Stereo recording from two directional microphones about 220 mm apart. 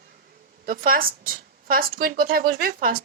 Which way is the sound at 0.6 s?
40° right (ahead or behind).